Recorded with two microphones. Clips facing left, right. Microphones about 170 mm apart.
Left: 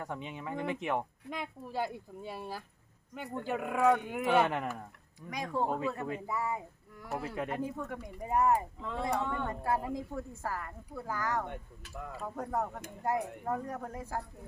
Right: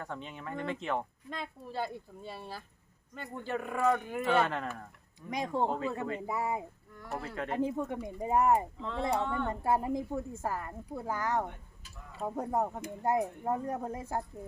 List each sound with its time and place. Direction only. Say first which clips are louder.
0.0 s speech: left 1 dB; 15° left (ahead or behind)
5.3 s a woman's voice: right 2 dB; 25° right (ahead or behind)
6.9 s speech: left 2 dB; 5° left (ahead or behind)
7.5 s a woman's voice: right 4 dB; 25° right (ahead or behind)
11.8 s speech: left 9 dB; 75° left (ahead or behind)
12.2 s a woman's voice: right 4 dB; 20° right (ahead or behind)